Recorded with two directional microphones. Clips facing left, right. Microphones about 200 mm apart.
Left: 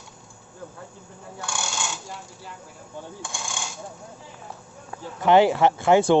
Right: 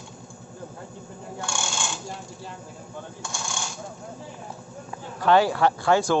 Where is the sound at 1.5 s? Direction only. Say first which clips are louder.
Left 1 dB; 5° left (ahead or behind).